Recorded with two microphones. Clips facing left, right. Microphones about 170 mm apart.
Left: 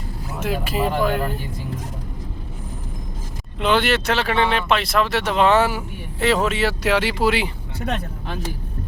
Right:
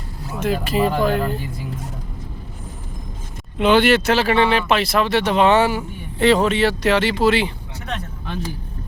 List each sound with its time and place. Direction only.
0.3 s speech: 5° left (ahead or behind)
3.6 s speech: centre (ahead or behind)